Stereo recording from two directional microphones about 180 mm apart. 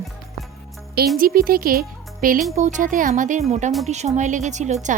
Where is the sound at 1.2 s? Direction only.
55° right (ahead or behind).